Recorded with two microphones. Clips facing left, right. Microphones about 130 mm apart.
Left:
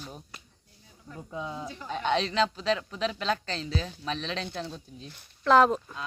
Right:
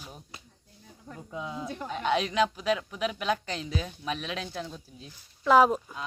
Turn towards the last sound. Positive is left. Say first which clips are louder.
# even
turn(degrees=-5)  # may be behind; listen again after turning